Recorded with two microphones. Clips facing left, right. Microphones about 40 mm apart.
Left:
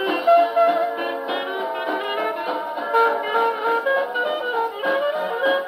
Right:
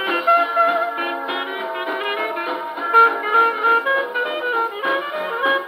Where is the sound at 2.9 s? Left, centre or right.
Right.